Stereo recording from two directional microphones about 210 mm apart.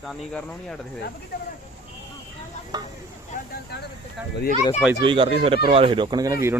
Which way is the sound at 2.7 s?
20° right (ahead or behind).